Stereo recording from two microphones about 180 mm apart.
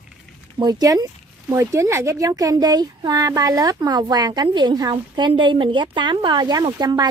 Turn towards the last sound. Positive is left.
turn(degrees=-25)  # may be behind; listen again after turning